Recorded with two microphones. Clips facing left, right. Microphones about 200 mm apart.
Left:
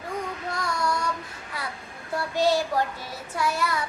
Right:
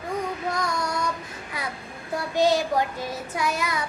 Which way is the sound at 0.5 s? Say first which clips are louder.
Even; 20° right (ahead or behind).